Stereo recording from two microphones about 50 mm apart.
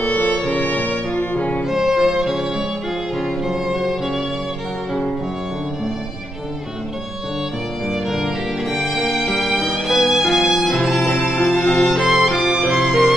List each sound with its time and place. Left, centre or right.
0.0 s music: left
1.7 s music: centre
3.4 s music: centre
7.9 s violin: centre
8.7 s music: left
9.3 s music: left
9.8 s music: centre
11.0 s music: left
11.9 s music: centre
12.5 s music: left